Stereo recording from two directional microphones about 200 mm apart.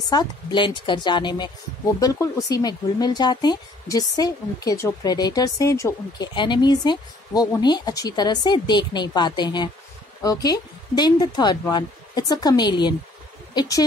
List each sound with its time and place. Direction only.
0.1 s a woman's voice: 20° left (ahead or behind)